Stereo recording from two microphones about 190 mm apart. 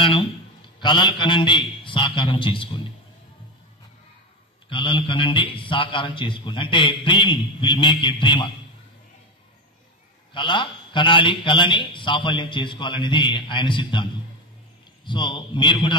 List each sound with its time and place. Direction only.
0.0 s a man's voice: 25° left (ahead or behind)
4.6 s a man's voice: 25° left (ahead or behind)
10.3 s a man's voice: 25° left (ahead or behind)
15.0 s a man's voice: 25° left (ahead or behind)